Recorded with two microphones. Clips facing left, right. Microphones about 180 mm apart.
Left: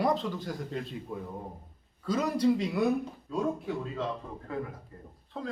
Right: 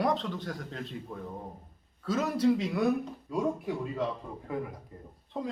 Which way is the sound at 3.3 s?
10° right (ahead or behind).